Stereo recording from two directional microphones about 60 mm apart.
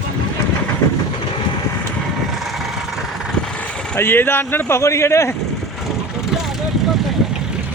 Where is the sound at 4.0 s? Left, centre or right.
Left.